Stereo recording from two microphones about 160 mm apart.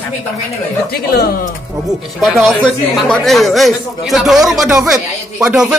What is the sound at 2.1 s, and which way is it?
Speech, centre (ahead or behind).